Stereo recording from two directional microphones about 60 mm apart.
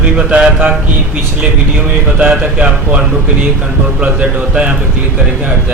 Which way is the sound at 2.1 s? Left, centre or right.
Right.